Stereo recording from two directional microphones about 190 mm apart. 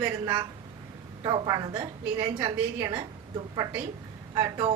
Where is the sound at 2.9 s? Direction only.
20° right (ahead or behind).